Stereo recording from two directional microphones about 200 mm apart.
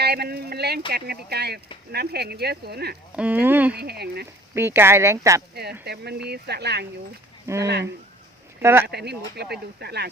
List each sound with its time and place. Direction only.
0.0 s speech: 55° right (ahead or behind)
3.2 s speech: 10° right (ahead or behind)
3.8 s speech: 55° right (ahead or behind)
4.5 s speech: 10° right (ahead or behind)
5.8 s speech: 55° right (ahead or behind)
8.9 s speech: 55° right (ahead or behind)